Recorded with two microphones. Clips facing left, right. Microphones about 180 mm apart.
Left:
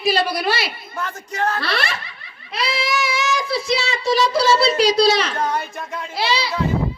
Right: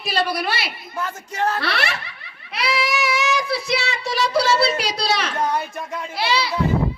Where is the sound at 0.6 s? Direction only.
5° right (ahead or behind).